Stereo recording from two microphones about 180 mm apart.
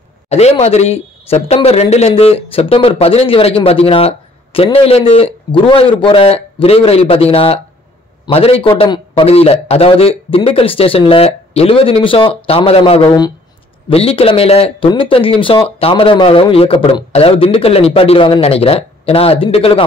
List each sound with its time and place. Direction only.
0.3 s speech: 35° left (ahead or behind)